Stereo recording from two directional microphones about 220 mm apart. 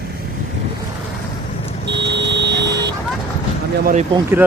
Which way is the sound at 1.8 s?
50° right (ahead or behind).